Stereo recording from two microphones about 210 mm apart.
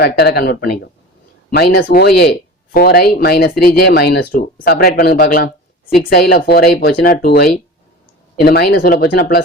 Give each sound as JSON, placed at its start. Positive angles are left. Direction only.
{"t": 0.0, "sound": "speech", "side_deg": 50}